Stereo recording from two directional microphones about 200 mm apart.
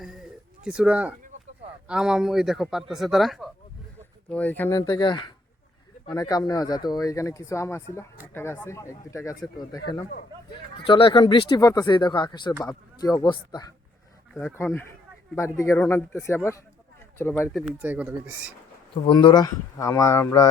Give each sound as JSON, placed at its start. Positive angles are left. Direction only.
{"t": 0.6, "sound": "a man's voice", "side_deg": -5}
{"t": 14.3, "sound": "speech", "side_deg": 10}
{"t": 17.7, "sound": "speech", "side_deg": -5}
{"t": 19.0, "sound": "speech", "side_deg": 20}